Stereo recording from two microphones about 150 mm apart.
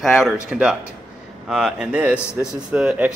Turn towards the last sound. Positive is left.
turn(degrees=-5)  # may be behind; listen again after turning